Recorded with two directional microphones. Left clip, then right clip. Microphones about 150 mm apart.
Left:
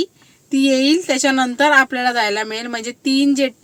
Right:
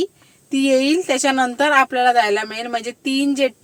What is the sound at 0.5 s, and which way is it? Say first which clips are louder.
A woman's voice: left 1 dB; 10° left (ahead or behind).